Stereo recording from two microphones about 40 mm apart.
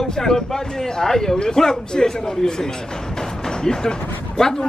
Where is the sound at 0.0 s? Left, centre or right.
Centre.